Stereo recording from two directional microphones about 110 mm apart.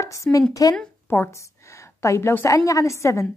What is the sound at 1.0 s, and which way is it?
A woman's voice, 20° left (ahead or behind).